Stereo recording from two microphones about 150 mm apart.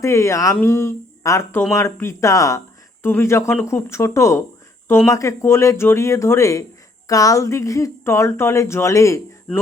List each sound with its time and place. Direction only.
0.0 s a woman's voice: 20° left (ahead or behind)